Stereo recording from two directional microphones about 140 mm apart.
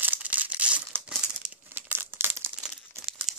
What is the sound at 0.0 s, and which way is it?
Crumpling, 10° right (ahead or behind).